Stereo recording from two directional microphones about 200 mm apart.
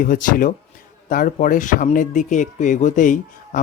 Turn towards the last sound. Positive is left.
turn(degrees=40)  # may be behind; listen again after turning